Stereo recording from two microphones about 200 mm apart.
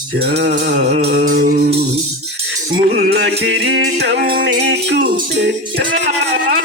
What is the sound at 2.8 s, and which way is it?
Music, 55° right (ahead or behind).